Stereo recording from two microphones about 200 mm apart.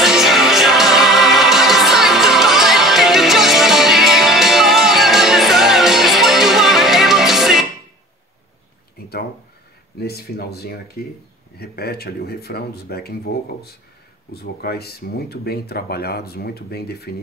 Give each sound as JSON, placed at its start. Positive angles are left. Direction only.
{"t": 0.0, "sound": "music", "side_deg": 0}
{"t": 9.9, "sound": "speech", "side_deg": 55}